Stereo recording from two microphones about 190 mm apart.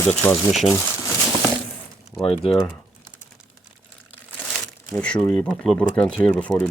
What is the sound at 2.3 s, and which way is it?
Speech, 25° left (ahead or behind).